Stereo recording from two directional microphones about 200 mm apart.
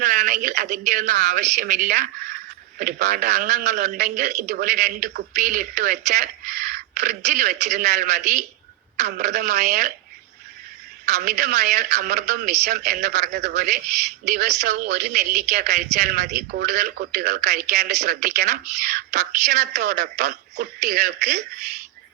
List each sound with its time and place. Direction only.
0.0 s a woman's voice: 40° right (ahead or behind)
9.0 s a woman's voice: 55° right (ahead or behind)
11.0 s a woman's voice: 55° right (ahead or behind)